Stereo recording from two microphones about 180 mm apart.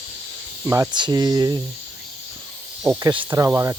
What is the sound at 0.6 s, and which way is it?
Speech, 15° right (ahead or behind).